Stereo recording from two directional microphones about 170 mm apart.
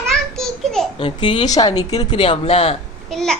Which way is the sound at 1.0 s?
30° left (ahead or behind).